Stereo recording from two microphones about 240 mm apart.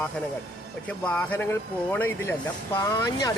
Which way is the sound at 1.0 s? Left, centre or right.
Centre.